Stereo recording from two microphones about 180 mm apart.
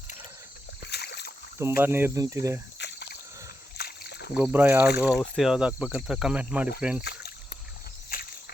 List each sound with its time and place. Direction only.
0.9 s rowboat: 65° left (ahead or behind)
1.5 s speech: 15° right (ahead or behind)
2.7 s a sound: 70° left (ahead or behind)
3.8 s boat: 60° left (ahead or behind)
4.4 s speech: 10° right (ahead or behind)
7.0 s rowboat: 65° left (ahead or behind)